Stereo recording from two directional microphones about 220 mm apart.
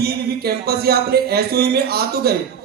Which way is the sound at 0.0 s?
45° right (ahead or behind).